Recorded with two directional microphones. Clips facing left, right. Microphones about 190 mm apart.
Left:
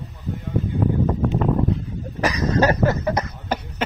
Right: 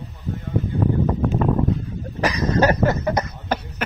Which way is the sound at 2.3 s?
25° right (ahead or behind).